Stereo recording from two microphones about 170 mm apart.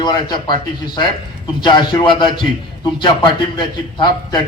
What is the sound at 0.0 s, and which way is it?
Speech, 25° left (ahead or behind).